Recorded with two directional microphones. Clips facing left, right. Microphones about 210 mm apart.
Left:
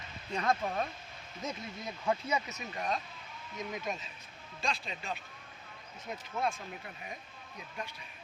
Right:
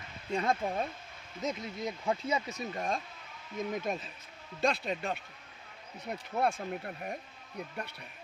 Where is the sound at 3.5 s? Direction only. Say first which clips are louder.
Right 5 dB; 50° right (ahead or behind).